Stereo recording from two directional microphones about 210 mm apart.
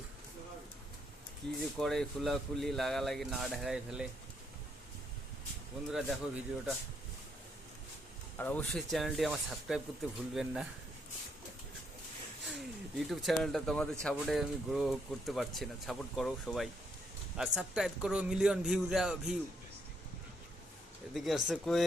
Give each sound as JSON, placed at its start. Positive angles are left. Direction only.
{"t": 1.4, "sound": "speech", "side_deg": 5}
{"t": 5.9, "sound": "speech", "side_deg": 0}
{"t": 8.4, "sound": "speech", "side_deg": 10}
{"t": 12.5, "sound": "speech", "side_deg": 0}
{"t": 21.1, "sound": "speech", "side_deg": 0}